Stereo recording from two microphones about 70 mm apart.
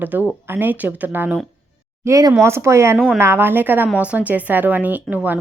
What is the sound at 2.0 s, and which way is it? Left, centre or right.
Speech, right.